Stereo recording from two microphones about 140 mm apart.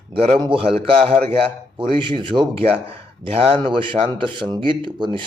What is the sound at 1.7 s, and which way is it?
A man's voice, 35° right (ahead or behind).